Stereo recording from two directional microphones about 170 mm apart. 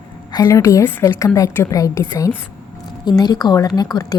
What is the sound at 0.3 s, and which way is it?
A woman's voice, 15° left (ahead or behind).